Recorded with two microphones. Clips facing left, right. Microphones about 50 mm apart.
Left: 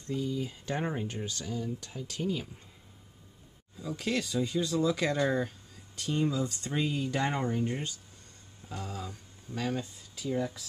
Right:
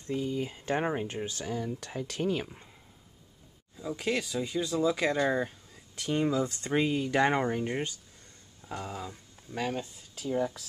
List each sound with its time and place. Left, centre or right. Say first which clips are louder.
0.0 s speech: right 1 dB; right
1.4 s speech: right 2 dB; right
3.7 s speech: right 1 dB; centre
5.9 s speech: right 2 dB; right
8.6 s a sound: right 2 dB; right
10.2 s speech: right 2 dB; right